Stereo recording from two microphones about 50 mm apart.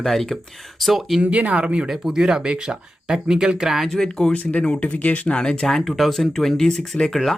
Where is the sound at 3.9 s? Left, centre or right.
Centre.